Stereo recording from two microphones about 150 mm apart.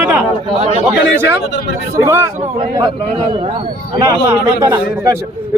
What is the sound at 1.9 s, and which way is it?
Speech, 20° right (ahead or behind).